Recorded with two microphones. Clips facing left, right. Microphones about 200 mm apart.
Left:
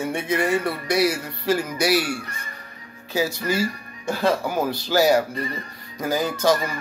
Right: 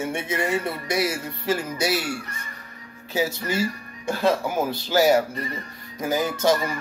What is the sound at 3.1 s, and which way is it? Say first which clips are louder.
Speech: left 2 dB; 25° right (ahead or behind).